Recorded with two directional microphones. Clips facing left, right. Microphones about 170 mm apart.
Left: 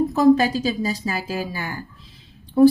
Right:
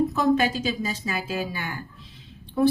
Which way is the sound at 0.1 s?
35° left (ahead or behind).